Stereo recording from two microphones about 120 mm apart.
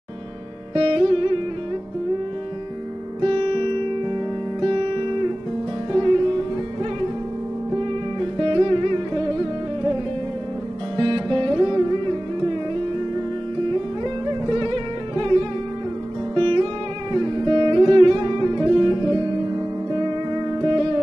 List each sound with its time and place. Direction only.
0.7 s music: 45° right (ahead or behind)
3.2 s music: 45° right (ahead or behind)
5.9 s music: 40° right (ahead or behind)
7.7 s music: 45° right (ahead or behind)
11.0 s music: 40° right (ahead or behind)
14.0 s music: 40° right (ahead or behind)
16.3 s music: 45° right (ahead or behind)